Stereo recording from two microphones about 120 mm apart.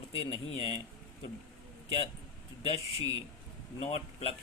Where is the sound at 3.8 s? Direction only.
55° left (ahead or behind).